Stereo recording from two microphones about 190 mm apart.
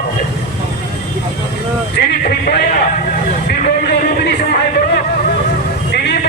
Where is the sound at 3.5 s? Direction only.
60° left (ahead or behind).